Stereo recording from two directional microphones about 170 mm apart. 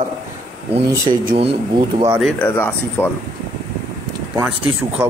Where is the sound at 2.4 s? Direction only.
10° left (ahead or behind).